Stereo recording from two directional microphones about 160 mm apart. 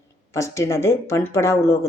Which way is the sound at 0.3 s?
20° left (ahead or behind).